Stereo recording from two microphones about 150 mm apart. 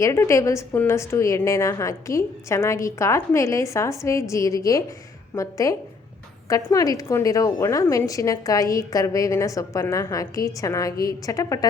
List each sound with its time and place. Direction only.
0.0 s a woman's voice: 20° left (ahead or behind)